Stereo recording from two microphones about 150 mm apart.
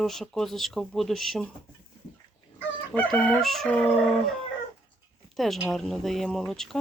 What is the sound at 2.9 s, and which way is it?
Speech, 10° left (ahead or behind).